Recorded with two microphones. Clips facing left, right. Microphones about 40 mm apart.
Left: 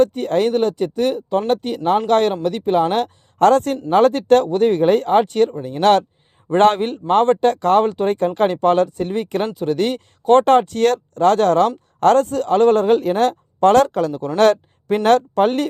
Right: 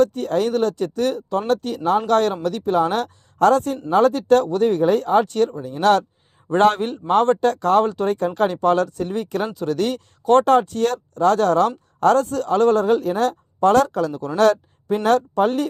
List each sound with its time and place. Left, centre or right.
0.0 s a man's voice: left
10.4 s a man's voice: left
14.8 s speech: left